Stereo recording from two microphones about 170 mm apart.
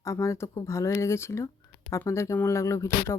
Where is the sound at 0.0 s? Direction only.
15° left (ahead or behind).